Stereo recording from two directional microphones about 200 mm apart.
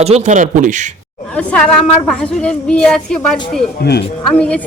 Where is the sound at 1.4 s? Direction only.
5° left (ahead or behind).